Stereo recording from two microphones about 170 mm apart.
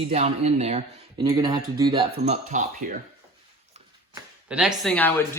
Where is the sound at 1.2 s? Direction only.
25° right (ahead or behind); by 2.6 s 45° right (ahead or behind).